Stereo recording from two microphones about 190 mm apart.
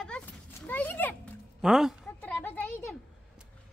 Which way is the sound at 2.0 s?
10° left (ahead or behind).